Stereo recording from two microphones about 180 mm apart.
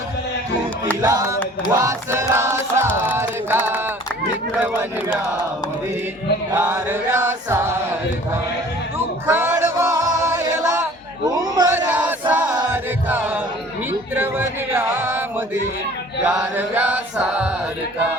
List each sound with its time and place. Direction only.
1.0 s chant: 15° right (ahead or behind)
6.5 s chant: 10° right (ahead or behind)
9.2 s music: 10° right (ahead or behind)
11.3 s a sound: 20° right (ahead or behind)
11.9 s battle cry: 5° right (ahead or behind)
12.3 s chant: 10° right (ahead or behind)
12.7 s music: 10° right (ahead or behind)
14.2 s yodeling: 10° right (ahead or behind)
16.2 s chant: 5° right (ahead or behind)